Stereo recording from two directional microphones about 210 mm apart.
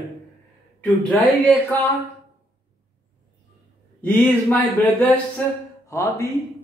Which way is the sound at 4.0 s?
10° left (ahead or behind).